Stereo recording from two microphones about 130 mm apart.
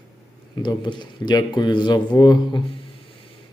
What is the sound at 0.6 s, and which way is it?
Speech, 35° left (ahead or behind).